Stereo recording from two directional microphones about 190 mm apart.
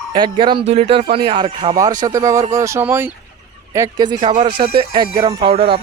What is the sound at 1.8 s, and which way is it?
Speech, 20° right (ahead or behind).